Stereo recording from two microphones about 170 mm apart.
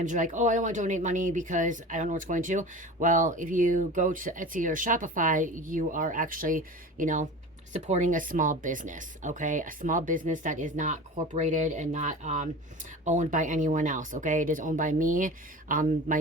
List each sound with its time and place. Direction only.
0.0 s speech: 50° right (ahead or behind)